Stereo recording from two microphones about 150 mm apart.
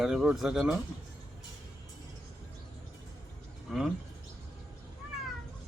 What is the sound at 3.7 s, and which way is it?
Bird, 5° right (ahead or behind).